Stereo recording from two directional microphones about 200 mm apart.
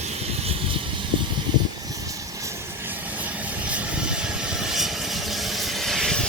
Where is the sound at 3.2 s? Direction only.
5° right (ahead or behind).